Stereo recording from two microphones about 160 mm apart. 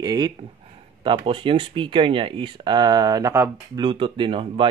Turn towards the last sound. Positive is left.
turn(degrees=-35)  # may be behind; listen again after turning